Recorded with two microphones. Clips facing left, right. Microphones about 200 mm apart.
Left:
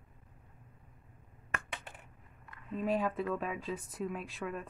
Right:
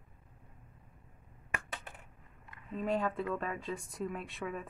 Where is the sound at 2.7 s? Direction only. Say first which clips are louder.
Left 1 dB; 5° left (ahead or behind).